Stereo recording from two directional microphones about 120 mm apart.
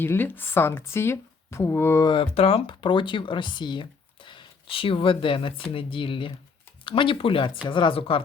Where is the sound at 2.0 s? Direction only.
45° left (ahead or behind).